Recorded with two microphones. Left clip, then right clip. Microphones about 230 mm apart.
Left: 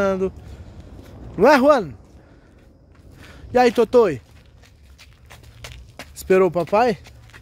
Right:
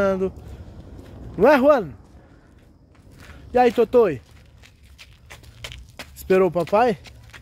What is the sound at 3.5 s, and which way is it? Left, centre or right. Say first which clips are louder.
Speech: left 1 dB; centre.